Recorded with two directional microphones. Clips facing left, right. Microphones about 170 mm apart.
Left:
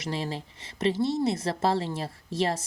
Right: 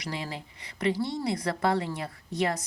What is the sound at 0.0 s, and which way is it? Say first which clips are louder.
A woman's voice: left 4 dB; 25° left (ahead or behind).